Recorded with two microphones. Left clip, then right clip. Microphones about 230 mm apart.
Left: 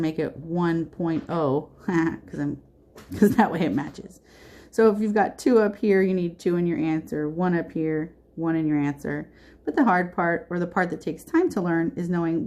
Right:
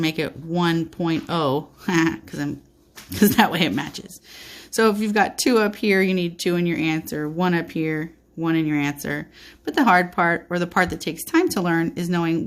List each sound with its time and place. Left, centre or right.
0.0 s speech: right